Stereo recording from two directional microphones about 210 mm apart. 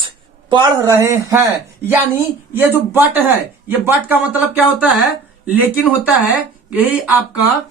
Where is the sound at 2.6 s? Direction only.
10° right (ahead or behind).